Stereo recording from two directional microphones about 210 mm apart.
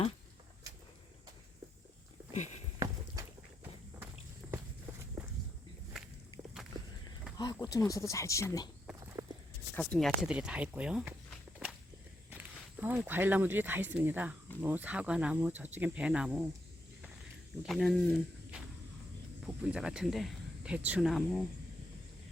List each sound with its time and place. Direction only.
2.7 s walk: 15° right (ahead or behind)
7.3 s speech: 20° left (ahead or behind)
9.2 s walk: 15° right (ahead or behind)
9.9 s speech: centre (ahead or behind)
17.6 s speech: centre (ahead or behind)
19.6 s speech: 5° right (ahead or behind)